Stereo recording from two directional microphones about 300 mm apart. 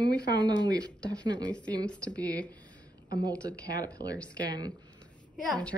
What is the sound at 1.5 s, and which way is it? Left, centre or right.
A woman's voice, centre.